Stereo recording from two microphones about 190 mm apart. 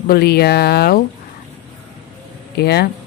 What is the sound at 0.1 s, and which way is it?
Speech, 55° left (ahead or behind).